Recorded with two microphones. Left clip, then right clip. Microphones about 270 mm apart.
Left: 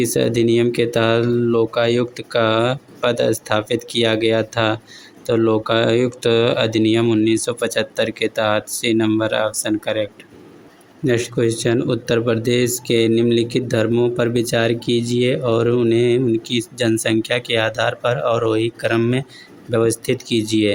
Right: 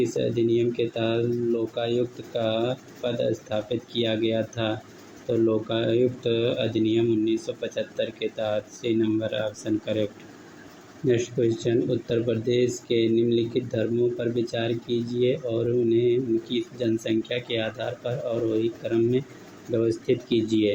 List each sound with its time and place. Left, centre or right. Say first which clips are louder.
0.0 s speech: left 7 dB; left